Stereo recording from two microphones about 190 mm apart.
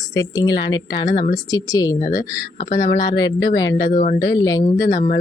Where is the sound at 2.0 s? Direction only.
40° left (ahead or behind).